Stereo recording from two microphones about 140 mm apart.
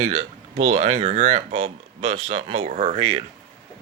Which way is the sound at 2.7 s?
60° right (ahead or behind).